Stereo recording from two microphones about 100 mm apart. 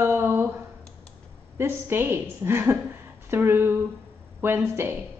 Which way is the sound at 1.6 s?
25° right (ahead or behind).